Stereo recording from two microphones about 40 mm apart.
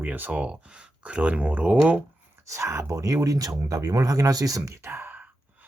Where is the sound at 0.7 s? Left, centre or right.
Right.